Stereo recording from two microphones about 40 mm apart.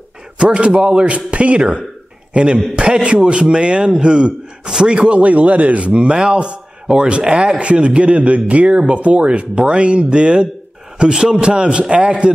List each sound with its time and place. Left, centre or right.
0.4 s a man's voice: right